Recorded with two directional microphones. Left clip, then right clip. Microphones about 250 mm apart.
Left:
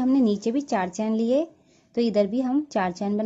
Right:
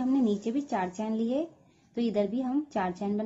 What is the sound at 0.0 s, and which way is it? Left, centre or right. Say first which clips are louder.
A woman's voice: left 6 dB; left.